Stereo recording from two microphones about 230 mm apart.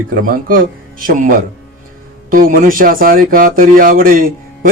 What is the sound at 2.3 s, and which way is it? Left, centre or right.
Speech, right.